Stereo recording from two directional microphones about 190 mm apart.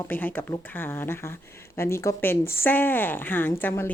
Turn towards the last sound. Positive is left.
turn(degrees=10)  # may be behind; listen again after turning